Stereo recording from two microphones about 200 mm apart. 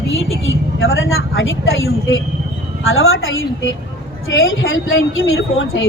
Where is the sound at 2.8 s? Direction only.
90° left.